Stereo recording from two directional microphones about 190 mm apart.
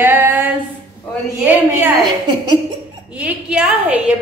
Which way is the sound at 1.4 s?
10° right (ahead or behind).